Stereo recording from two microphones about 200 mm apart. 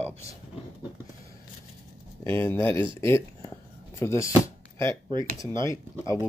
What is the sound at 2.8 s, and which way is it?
Speech, 25° right (ahead or behind).